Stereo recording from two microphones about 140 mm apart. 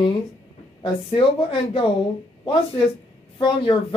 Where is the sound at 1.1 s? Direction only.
40° left (ahead or behind).